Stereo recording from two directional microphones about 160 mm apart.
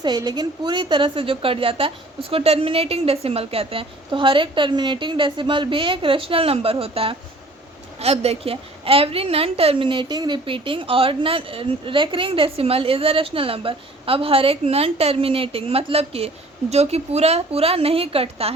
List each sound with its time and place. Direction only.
0.0 s a woman's voice: 25° right (ahead or behind)